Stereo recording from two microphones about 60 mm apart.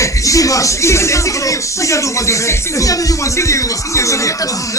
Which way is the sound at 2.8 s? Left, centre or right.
Left.